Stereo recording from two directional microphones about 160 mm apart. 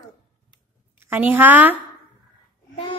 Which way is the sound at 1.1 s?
10° right (ahead or behind).